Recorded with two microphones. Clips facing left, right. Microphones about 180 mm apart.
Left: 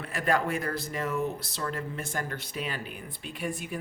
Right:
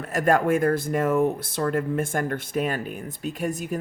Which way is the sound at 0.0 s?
45° right (ahead or behind).